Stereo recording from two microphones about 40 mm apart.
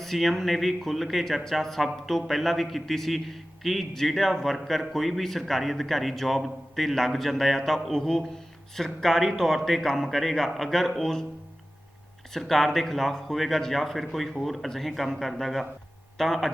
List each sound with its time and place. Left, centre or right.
0.0 s a man's voice: centre
12.3 s a man's voice: centre